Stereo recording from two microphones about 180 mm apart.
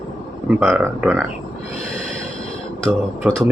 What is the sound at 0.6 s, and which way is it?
Speech, 5° right (ahead or behind).